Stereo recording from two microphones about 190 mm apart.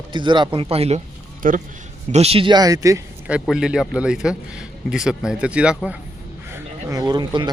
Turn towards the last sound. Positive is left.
turn(degrees=-25)  # may be behind; listen again after turning